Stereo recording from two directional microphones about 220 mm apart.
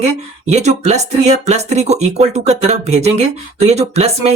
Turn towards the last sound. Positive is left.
turn(degrees=-30)  # may be behind; listen again after turning